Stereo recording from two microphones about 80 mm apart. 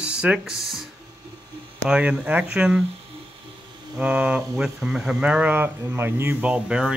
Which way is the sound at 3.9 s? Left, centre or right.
Centre.